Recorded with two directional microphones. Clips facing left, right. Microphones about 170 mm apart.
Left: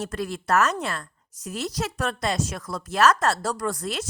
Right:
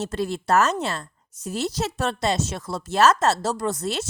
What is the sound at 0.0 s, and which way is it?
A woman's voice, 25° right (ahead or behind).